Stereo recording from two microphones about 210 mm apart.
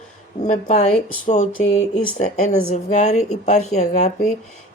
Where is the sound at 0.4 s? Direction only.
30° left (ahead or behind).